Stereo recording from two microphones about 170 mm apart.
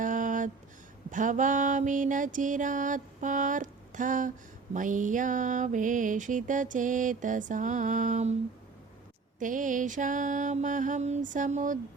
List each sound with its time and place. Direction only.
0.0 s a sound: 50° right (ahead or behind)
1.1 s mantra: 50° right (ahead or behind)
9.4 s mantra: 50° right (ahead or behind)